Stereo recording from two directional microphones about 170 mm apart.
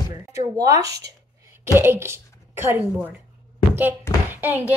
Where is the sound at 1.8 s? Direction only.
15° right (ahead or behind).